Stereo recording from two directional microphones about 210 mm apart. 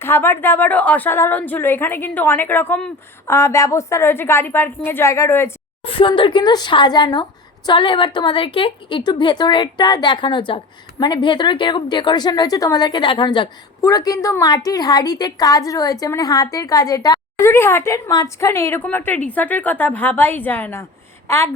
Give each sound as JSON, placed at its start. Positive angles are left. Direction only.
{"t": 0.0, "sound": "a woman's voice", "side_deg": 10}
{"t": 5.8, "sound": "a woman's voice", "side_deg": 25}